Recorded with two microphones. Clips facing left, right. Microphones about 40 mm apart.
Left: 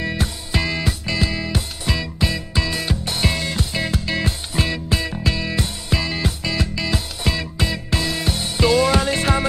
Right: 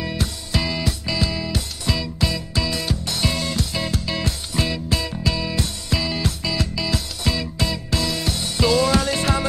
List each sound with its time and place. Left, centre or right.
0.0 s music: left